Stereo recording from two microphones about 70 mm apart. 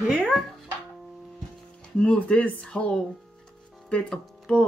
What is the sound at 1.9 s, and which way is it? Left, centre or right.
Speech, centre.